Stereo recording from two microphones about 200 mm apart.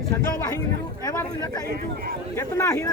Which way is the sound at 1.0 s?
20° left (ahead or behind).